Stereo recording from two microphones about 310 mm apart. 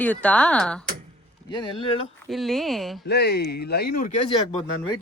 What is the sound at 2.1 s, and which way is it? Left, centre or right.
Speech, centre.